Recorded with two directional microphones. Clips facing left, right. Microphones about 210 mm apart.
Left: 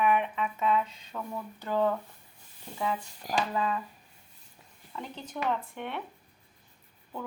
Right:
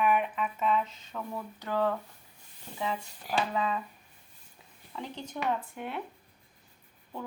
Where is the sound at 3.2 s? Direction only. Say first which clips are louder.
Even; 40° left (ahead or behind).